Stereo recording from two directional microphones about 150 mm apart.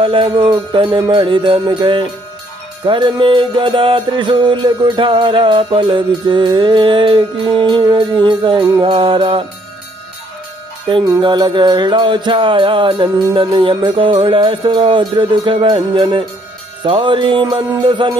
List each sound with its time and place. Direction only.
0.0 s music: 35° right (ahead or behind)
10.9 s music: 30° right (ahead or behind)